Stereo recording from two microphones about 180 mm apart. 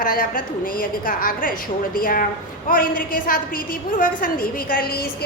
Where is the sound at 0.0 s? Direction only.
50° left (ahead or behind).